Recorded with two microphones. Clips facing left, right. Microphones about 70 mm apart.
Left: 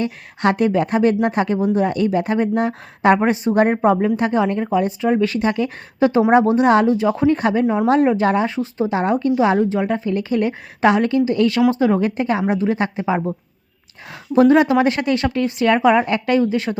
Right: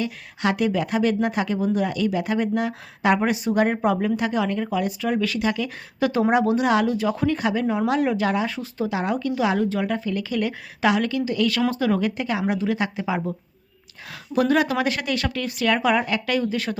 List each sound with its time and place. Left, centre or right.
0.0 s speech: left
7.6 s speech: centre
7.9 s speech: left
14.3 s speech: left